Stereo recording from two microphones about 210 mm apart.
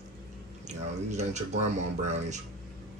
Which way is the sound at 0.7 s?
35° right (ahead or behind).